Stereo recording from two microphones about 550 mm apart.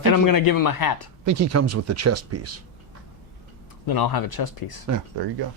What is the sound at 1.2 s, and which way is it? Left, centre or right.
Speech, right.